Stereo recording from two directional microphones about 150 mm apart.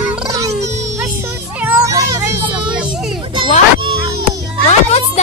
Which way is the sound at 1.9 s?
20° right (ahead or behind).